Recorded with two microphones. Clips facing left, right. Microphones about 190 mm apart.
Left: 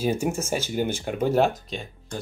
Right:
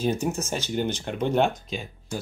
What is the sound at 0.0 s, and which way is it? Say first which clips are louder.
Speech: left 1 dB; 10° left (ahead or behind).